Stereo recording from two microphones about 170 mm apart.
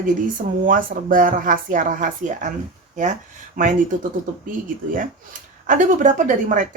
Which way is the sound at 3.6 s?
50° right (ahead or behind).